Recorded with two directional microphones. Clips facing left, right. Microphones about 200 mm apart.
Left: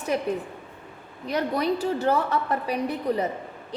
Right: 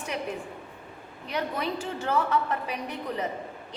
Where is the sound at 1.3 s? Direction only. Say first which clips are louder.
Left 6 dB; 40° left (ahead or behind).